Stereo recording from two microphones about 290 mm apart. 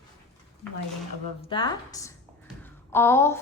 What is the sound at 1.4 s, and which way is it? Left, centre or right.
Speech, centre.